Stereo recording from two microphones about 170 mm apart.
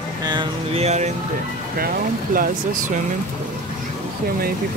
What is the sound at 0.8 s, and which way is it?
Speech, 40° right (ahead or behind).